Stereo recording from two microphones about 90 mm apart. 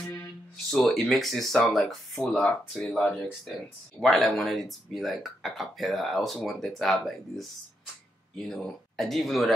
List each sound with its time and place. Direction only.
0.0 s music: 25° left (ahead or behind)
0.7 s speech: 5° left (ahead or behind)